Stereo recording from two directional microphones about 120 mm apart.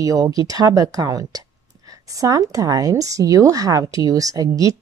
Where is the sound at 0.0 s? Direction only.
30° right (ahead or behind).